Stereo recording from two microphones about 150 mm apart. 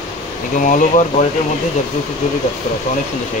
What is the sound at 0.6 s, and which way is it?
Speech, 60° left (ahead or behind).